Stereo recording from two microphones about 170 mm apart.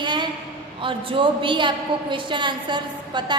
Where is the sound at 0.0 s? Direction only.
25° right (ahead or behind).